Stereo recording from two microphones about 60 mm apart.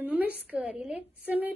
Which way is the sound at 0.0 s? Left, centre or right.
Right.